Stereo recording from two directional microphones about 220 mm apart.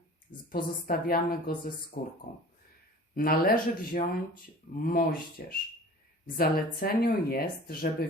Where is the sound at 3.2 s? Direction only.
40° left (ahead or behind).